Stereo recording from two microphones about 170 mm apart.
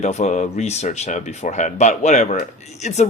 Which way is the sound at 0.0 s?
40° left (ahead or behind).